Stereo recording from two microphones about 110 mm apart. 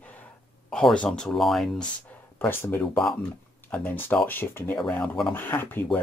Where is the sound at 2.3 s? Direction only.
20° left (ahead or behind).